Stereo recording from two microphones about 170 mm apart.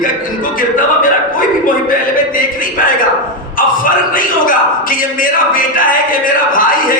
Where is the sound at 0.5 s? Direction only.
55° left (ahead or behind).